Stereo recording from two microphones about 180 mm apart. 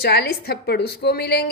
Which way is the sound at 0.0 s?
60° left (ahead or behind).